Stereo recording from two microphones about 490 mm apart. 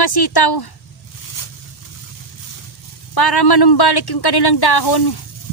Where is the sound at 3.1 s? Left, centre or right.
Left.